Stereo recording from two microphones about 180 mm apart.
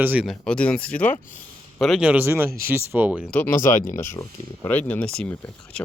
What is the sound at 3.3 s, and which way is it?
Speech, 10° left (ahead or behind).